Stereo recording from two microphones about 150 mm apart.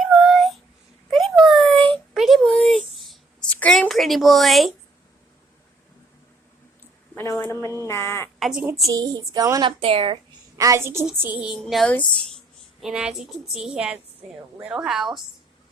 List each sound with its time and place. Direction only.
0.0 s a sound: centre (ahead or behind)
7.2 s speech: 20° left (ahead or behind)
8.4 s a woman's voice: centre (ahead or behind)
8.8 s speech: 25° right (ahead or behind)
10.6 s a woman's voice: 20° right (ahead or behind)
11.6 s a woman's voice: 5° left (ahead or behind)
12.8 s a woman's voice: 5° right (ahead or behind)